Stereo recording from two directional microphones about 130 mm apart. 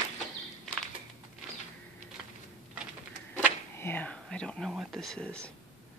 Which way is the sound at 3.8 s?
15° left (ahead or behind).